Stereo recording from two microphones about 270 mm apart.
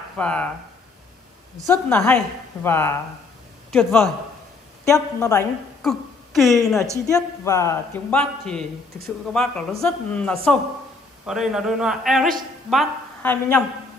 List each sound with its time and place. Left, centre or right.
0.2 s a man's voice: centre
1.7 s a woman's voice: centre
5.8 s a sound: centre
6.6 s a man's voice: centre